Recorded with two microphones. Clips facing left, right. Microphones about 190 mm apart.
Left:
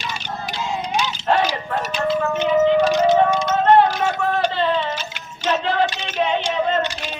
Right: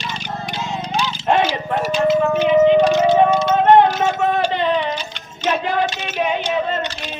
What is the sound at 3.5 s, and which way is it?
Music, 20° right (ahead or behind).